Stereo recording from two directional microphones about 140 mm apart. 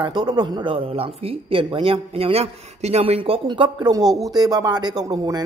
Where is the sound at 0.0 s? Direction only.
30° right (ahead or behind).